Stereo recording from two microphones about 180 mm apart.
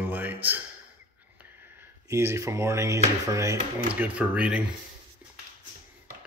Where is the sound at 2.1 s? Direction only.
15° right (ahead or behind).